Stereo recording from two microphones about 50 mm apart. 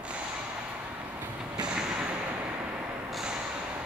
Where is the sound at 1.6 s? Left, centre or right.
Centre.